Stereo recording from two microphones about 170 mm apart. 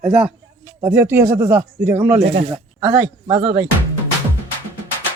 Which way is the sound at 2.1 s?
40° right (ahead or behind).